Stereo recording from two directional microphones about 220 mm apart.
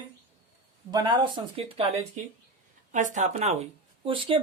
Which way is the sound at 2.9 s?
35° right (ahead or behind).